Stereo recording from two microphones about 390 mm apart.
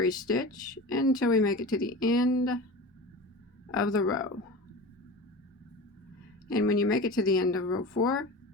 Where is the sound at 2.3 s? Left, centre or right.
Left.